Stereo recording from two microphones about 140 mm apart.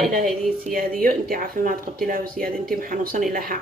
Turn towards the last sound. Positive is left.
turn(degrees=-90)